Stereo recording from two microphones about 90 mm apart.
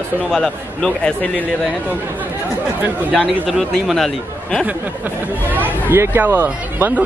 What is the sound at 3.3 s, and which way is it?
Speech, centre (ahead or behind).